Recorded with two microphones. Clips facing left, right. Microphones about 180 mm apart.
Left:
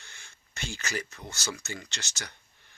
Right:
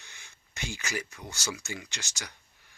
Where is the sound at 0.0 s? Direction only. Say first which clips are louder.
Even; 15° right (ahead or behind).